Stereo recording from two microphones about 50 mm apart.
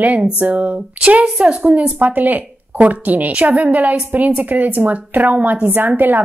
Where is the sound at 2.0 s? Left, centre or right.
Right.